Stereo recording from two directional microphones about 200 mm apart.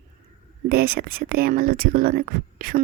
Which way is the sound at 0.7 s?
50° right (ahead or behind).